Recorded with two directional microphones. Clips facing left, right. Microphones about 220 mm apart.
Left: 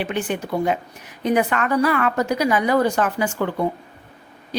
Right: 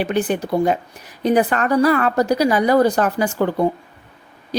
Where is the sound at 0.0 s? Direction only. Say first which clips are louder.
Right 5 dB; 35° right (ahead or behind).